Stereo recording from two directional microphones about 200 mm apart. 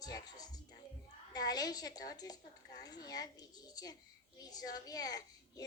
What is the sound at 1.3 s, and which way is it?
A woman's voice, 20° left (ahead or behind).